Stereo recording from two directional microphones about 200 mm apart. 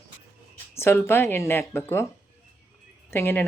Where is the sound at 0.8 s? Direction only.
10° left (ahead or behind).